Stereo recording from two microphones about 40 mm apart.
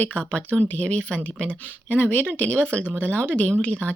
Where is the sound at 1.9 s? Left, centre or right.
Left.